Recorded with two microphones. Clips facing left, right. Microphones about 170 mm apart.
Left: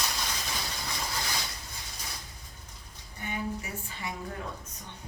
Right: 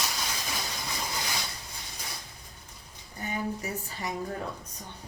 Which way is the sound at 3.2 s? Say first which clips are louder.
Right 2 dB; 40° right (ahead or behind).